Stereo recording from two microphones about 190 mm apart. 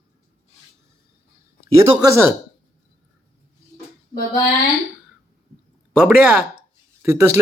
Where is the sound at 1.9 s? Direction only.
20° right (ahead or behind).